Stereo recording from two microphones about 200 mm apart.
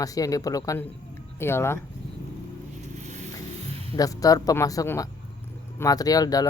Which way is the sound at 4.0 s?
15° left (ahead or behind).